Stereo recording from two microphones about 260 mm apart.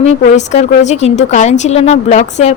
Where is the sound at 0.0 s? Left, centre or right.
Left.